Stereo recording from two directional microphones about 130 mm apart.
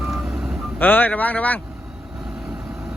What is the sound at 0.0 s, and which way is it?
Vehicle, 5° right (ahead or behind).